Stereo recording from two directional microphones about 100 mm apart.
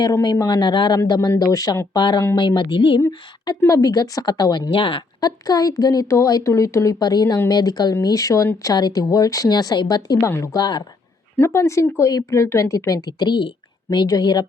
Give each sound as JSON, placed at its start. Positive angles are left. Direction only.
{"t": 0.2, "sound": "speech", "side_deg": 40}
{"t": 2.0, "sound": "speech", "side_deg": 50}
{"t": 3.6, "sound": "speech", "side_deg": 35}
{"t": 4.7, "sound": "speech", "side_deg": 60}
{"t": 5.2, "sound": "speech", "side_deg": 40}
{"t": 10.2, "sound": "speech", "side_deg": 30}
{"t": 11.3, "sound": "speech", "side_deg": 25}
{"t": 13.1, "sound": "speech", "side_deg": 50}